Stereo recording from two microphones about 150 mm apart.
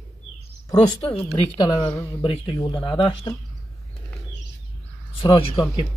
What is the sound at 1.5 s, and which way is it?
A man's voice, 25° left (ahead or behind).